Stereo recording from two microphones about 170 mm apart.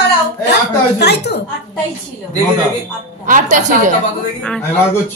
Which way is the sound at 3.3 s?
50° right (ahead or behind).